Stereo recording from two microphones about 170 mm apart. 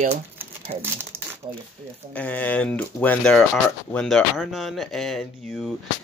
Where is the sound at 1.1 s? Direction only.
15° right (ahead or behind).